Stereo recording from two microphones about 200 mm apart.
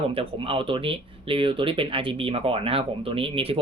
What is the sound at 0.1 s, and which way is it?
Speech, 25° right (ahead or behind).